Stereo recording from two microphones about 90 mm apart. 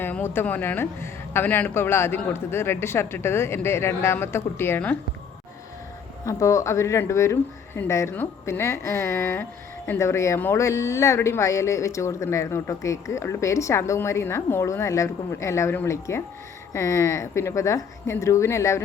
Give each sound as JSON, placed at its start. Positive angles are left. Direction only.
{"t": 0.0, "sound": "speech", "side_deg": 25}
{"t": 6.2, "sound": "speech", "side_deg": 35}